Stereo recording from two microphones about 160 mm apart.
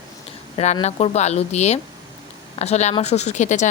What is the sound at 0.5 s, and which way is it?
A woman's voice, 45° left (ahead or behind).